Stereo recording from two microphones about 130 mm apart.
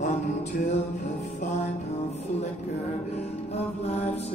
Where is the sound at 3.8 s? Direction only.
55° left (ahead or behind).